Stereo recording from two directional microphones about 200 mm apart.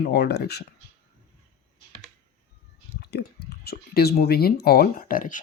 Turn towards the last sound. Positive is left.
turn(degrees=40)  # may be behind; listen again after turning